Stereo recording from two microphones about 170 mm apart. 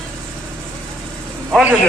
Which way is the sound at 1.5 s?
5° right (ahead or behind).